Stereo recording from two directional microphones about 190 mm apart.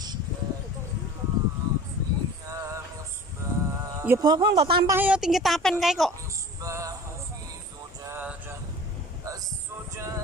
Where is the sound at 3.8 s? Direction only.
15° right (ahead or behind).